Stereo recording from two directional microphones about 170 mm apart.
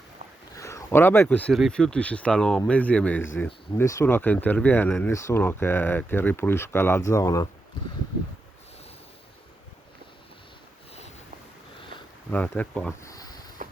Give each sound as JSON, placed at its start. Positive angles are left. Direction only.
{"t": 0.5, "sound": "speech", "side_deg": 20}
{"t": 12.3, "sound": "speech", "side_deg": 10}
{"t": 13.1, "sound": "a sound", "side_deg": 20}
{"t": 13.6, "sound": "vehicle", "side_deg": -50}